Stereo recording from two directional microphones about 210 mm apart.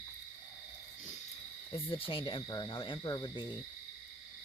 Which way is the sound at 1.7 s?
25° left (ahead or behind).